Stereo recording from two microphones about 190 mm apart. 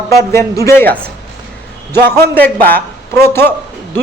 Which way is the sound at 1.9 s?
10° left (ahead or behind).